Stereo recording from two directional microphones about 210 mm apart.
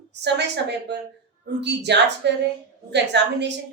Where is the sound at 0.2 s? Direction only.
55° right (ahead or behind).